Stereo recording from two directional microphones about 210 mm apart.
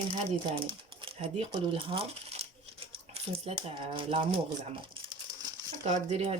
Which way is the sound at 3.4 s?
25° right (ahead or behind).